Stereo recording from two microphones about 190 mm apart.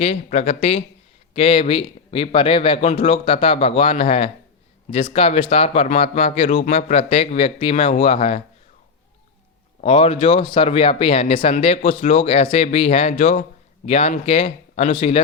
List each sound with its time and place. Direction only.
0.0 s speech: 35° left (ahead or behind)
9.8 s speech: 30° left (ahead or behind)